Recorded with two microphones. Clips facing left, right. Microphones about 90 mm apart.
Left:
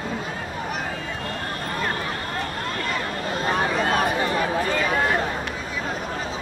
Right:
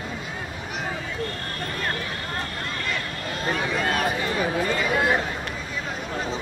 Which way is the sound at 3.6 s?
40° left (ahead or behind).